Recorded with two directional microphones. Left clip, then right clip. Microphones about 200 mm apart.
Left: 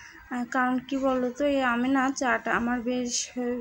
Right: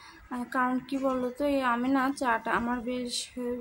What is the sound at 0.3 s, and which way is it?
A woman's voice, 20° left (ahead or behind).